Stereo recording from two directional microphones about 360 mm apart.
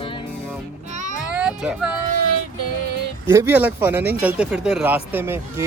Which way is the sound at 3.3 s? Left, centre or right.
Centre.